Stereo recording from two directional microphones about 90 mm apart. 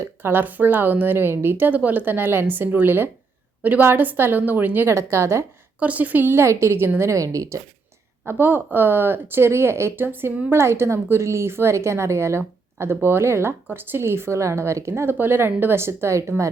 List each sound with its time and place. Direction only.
0.0 s a woman's voice: 25° right (ahead or behind)
5.8 s a woman's voice: 15° right (ahead or behind); by 7.6 s 40° right (ahead or behind)
8.3 s a woman's voice: 20° right (ahead or behind)